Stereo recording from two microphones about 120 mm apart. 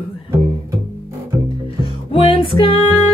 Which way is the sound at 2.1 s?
50° left (ahead or behind).